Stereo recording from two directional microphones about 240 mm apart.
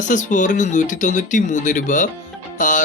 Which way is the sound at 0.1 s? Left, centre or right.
Left.